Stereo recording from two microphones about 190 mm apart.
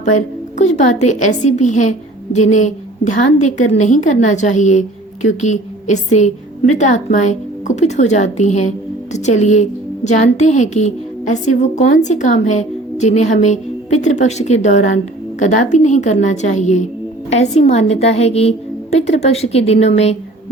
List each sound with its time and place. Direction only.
0.0 s a woman's voice: 40° left (ahead or behind)